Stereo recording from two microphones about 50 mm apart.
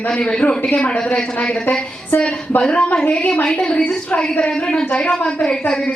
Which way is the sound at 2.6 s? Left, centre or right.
Left.